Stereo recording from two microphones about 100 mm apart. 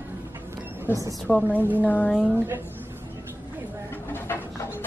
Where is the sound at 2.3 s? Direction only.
25° right (ahead or behind).